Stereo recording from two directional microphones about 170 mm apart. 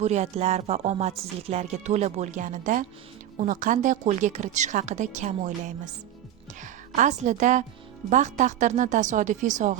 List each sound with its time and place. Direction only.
0.0 s music: 40° right (ahead or behind)
3.3 s a woman's voice: 45° right (ahead or behind)